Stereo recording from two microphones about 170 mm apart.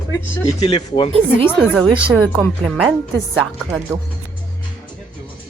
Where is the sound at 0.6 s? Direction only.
30° left (ahead or behind).